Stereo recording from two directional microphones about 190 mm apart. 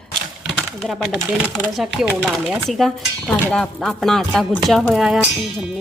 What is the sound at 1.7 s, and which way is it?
Speech, centre (ahead or behind).